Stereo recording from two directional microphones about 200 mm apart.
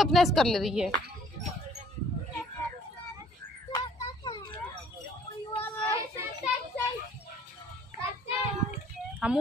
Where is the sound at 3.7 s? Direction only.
20° left (ahead or behind).